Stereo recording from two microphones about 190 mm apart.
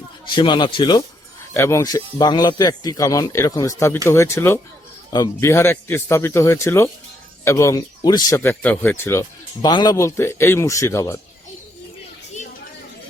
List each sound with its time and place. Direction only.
0.3 s a man's voice: 25° left (ahead or behind)